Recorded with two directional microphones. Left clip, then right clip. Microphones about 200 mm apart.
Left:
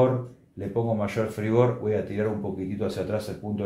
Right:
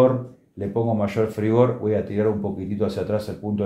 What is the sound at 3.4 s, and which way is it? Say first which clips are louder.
Speech: right 5 dB; 25° right (ahead or behind).